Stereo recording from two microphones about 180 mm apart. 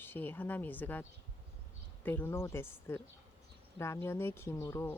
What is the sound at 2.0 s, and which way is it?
Speech, 10° left (ahead or behind).